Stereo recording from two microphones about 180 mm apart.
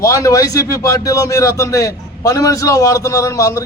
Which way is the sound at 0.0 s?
20° left (ahead or behind).